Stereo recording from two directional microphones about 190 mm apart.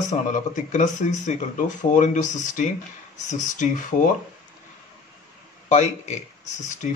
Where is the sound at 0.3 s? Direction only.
40° left (ahead or behind).